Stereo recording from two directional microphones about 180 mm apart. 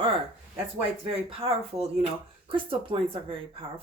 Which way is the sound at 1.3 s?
30° right (ahead or behind).